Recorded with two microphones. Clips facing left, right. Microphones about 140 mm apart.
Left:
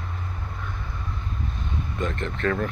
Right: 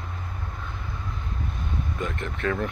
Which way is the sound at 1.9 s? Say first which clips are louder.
Left 6 dB; 10° right (ahead or behind).